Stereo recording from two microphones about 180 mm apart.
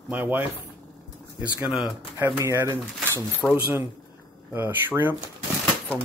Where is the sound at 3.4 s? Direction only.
5° left (ahead or behind).